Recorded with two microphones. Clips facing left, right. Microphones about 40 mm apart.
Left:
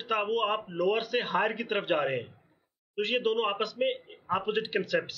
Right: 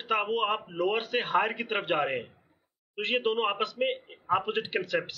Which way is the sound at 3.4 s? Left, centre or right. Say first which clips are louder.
Even; centre.